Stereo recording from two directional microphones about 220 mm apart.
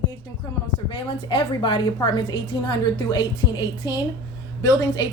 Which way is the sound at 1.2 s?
20° left (ahead or behind).